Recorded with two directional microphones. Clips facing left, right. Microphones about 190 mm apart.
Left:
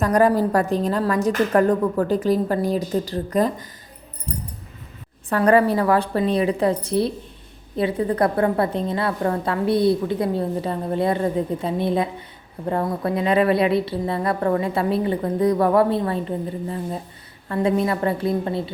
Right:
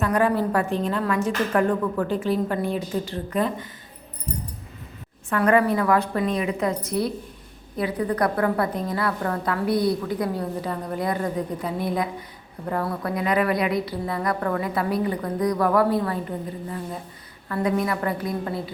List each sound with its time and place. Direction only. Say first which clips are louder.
0.0 s a woman's voice: left 4 dB; 40° left (ahead or behind)
5.3 s a woman's voice: left 3 dB; 35° left (ahead or behind)